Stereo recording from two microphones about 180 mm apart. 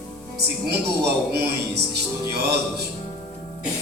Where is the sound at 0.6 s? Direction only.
65° right (ahead or behind).